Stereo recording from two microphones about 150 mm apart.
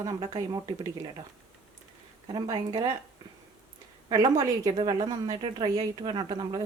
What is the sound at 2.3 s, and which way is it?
Speech, 30° right (ahead or behind).